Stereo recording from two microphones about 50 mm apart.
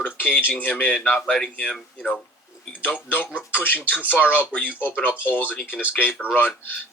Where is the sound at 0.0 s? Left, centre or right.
Left.